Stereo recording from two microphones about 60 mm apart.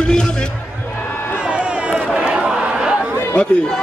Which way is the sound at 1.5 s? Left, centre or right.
Centre.